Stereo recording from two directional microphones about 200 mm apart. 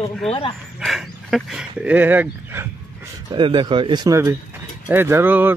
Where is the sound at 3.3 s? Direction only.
25° right (ahead or behind).